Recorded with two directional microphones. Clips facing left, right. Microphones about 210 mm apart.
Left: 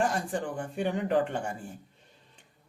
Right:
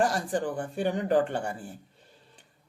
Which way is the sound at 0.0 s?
35° right (ahead or behind).